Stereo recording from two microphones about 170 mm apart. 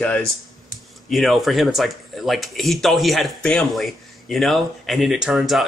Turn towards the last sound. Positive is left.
turn(degrees=0)  # may be behind; listen again after turning